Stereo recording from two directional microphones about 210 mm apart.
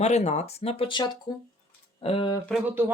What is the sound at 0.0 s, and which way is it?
Speech, 30° left (ahead or behind).